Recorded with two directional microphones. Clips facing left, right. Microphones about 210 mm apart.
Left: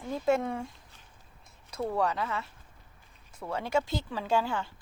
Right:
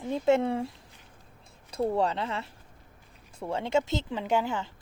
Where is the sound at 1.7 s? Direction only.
25° right (ahead or behind).